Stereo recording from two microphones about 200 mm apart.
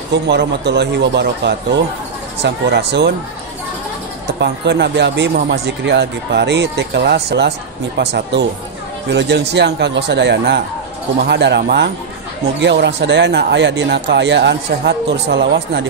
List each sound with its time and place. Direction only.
0.3 s speech: 60° right (ahead or behind)
4.4 s speech: 60° right (ahead or behind)